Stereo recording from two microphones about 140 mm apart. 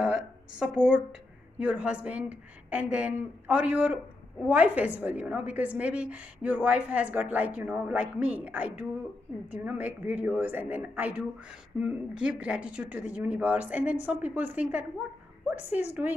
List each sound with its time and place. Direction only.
0.0 s a woman's voice: 5° right (ahead or behind)